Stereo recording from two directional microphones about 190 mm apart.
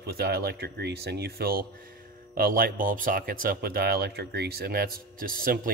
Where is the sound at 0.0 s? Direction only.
55° right (ahead or behind).